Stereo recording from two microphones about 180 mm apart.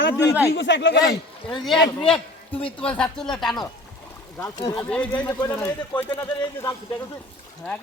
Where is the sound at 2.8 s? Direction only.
5° left (ahead or behind).